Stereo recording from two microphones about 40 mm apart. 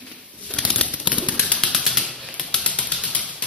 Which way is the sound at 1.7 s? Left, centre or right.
Centre.